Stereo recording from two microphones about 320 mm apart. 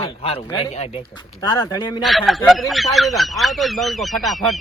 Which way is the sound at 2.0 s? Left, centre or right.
Centre.